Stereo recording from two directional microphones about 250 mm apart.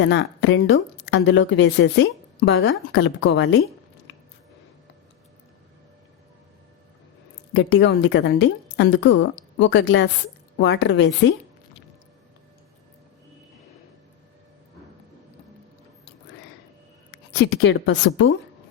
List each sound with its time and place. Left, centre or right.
0.0 s a woman's voice: left
7.5 s a woman's voice: left
17.3 s a woman's voice: left